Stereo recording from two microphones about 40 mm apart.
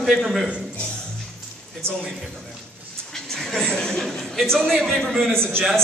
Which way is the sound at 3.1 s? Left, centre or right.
Centre.